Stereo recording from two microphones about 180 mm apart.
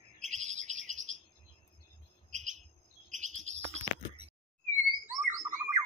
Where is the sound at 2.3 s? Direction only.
40° right (ahead or behind).